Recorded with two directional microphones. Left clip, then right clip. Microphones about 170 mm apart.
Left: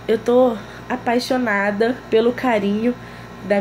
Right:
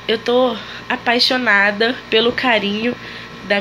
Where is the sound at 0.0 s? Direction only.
15° left (ahead or behind).